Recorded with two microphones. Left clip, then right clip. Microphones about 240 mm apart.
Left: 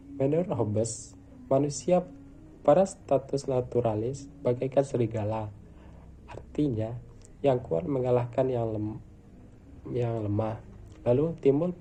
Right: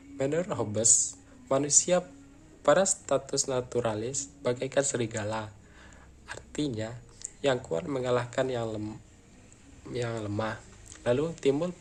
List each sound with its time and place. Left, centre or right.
0.2 s speech: centre
6.2 s a sound: centre
7.7 s speech: right
9.9 s speech: centre